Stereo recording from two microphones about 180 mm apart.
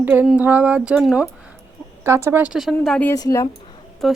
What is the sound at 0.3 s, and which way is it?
Speech, 10° right (ahead or behind).